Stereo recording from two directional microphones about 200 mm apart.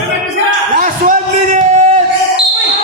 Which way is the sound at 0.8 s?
40° right (ahead or behind).